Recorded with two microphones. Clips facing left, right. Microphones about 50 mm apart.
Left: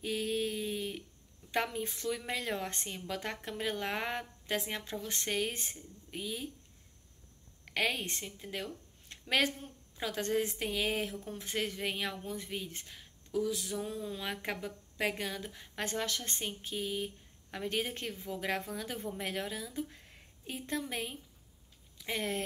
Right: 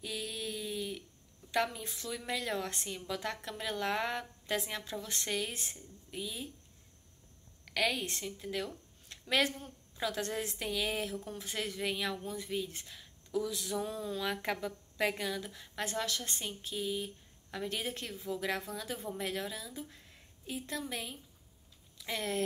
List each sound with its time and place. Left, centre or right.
0.0 s a sound: left
1.9 s a woman's voice: left
6.0 s speech: left
7.6 s a woman's voice: left
9.1 s a sound: left
9.6 s a woman's voice: centre
15.8 s speech: left
22.0 s speech: left